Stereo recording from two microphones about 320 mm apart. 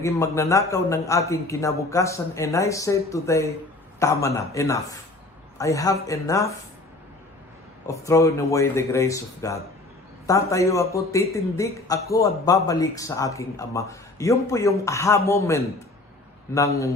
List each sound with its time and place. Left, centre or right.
0.0 s a man's voice: centre
7.9 s a man's voice: centre